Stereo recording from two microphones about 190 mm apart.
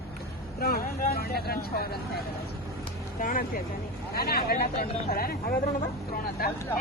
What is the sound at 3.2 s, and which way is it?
Speech, 45° left (ahead or behind).